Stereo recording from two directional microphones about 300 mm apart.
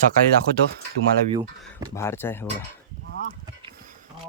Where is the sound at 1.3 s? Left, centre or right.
Centre.